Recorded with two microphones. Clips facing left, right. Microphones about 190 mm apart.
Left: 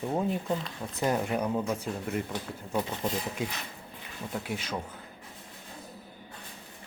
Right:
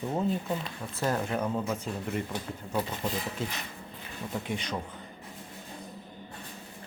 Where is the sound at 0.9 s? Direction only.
15° left (ahead or behind).